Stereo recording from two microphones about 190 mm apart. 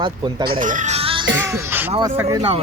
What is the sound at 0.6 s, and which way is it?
Music, 40° right (ahead or behind).